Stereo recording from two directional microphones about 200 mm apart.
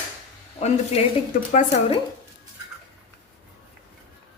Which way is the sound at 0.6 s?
35° left (ahead or behind).